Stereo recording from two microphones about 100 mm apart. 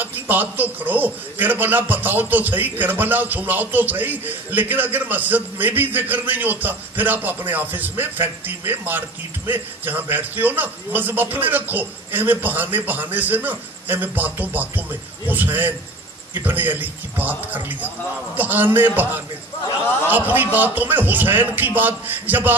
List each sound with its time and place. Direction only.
0.0 s a man's voice: 20° right (ahead or behind)